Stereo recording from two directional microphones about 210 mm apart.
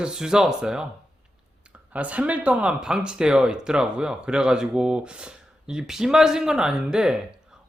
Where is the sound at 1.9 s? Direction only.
5° right (ahead or behind).